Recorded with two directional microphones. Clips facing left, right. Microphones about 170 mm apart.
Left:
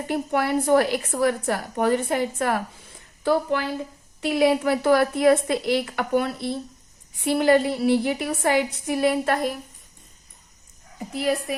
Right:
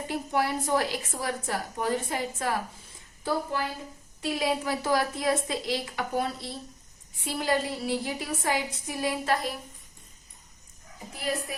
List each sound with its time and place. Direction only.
0.1 s a woman's voice: 60° left (ahead or behind)
4.2 s a woman's voice: 65° left (ahead or behind)
11.1 s a woman's voice: 75° left (ahead or behind)